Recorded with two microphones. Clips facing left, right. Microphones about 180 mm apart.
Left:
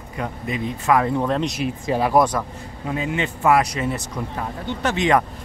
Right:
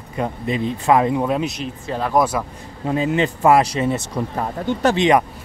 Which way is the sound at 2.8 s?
35° right (ahead or behind).